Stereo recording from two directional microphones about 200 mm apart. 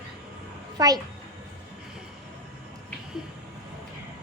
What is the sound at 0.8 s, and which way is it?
Speech, 20° right (ahead or behind).